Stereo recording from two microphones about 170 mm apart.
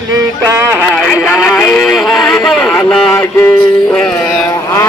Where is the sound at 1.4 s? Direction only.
5° left (ahead or behind).